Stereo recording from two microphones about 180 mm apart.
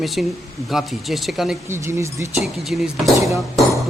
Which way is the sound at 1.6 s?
15° right (ahead or behind).